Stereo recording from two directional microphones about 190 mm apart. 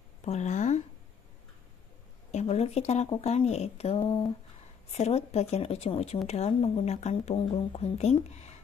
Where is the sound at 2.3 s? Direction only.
35° left (ahead or behind).